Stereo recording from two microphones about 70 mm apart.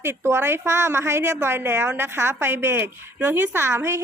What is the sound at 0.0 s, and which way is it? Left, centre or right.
A woman's voice, right.